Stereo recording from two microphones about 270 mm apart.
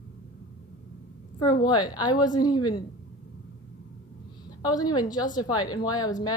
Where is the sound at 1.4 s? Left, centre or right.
Centre.